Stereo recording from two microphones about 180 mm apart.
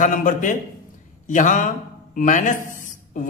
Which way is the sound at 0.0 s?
45° left (ahead or behind).